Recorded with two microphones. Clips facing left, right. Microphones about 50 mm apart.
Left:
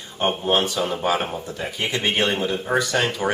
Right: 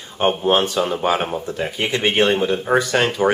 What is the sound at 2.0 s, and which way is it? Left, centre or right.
Speech, right.